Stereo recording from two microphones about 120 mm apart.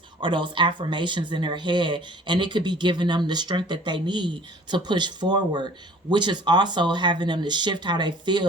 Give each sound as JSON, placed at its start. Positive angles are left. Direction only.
{"t": 0.2, "sound": "speech", "side_deg": -40}